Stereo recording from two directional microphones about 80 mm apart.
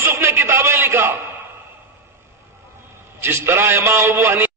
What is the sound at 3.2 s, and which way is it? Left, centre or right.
A man's voice, right.